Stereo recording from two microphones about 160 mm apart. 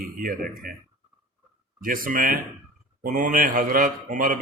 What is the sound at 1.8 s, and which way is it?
A man's voice, 60° right (ahead or behind).